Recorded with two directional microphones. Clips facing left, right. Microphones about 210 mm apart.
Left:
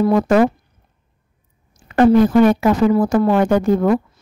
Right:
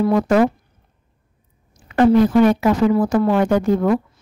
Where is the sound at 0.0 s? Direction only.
45° left (ahead or behind).